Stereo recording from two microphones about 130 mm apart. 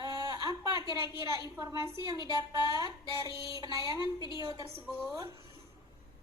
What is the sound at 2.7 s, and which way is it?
Speech, 30° right (ahead or behind).